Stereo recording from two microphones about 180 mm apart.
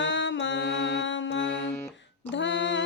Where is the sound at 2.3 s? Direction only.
90° left.